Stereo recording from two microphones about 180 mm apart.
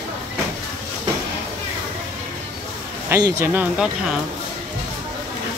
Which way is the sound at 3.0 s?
15° right (ahead or behind).